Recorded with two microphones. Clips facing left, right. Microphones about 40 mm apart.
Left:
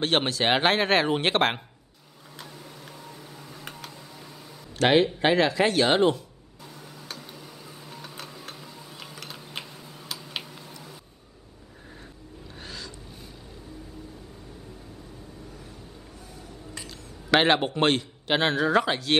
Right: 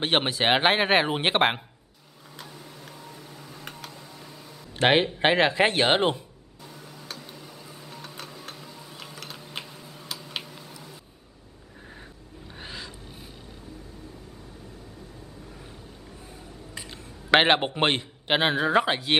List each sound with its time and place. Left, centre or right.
0.0 s a man's voice: centre
2.3 s a sound: centre
4.7 s speech: right
6.6 s tick-tock: centre
12.5 s music: right
16.8 s a man's voice: right